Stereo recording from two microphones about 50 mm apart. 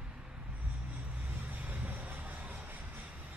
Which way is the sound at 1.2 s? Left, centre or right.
Right.